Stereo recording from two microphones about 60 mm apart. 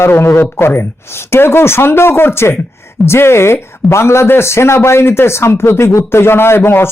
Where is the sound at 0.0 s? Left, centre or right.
Left.